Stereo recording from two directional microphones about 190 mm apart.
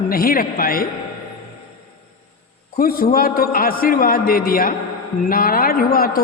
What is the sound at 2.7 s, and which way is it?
A woman's voice, 50° left (ahead or behind).